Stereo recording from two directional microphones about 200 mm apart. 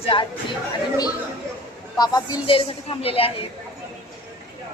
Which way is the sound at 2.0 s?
20° left (ahead or behind).